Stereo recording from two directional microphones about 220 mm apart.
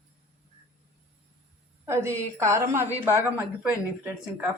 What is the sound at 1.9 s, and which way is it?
Speech, 10° right (ahead or behind).